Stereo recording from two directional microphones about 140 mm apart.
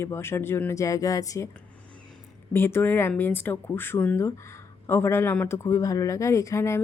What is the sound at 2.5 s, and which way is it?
Speech, 15° left (ahead or behind).